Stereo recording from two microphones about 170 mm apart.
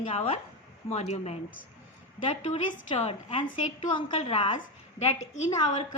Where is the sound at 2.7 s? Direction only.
40° left (ahead or behind).